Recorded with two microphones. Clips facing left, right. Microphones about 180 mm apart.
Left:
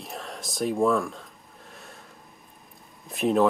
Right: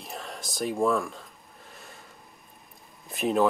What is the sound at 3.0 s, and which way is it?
Speech, centre (ahead or behind).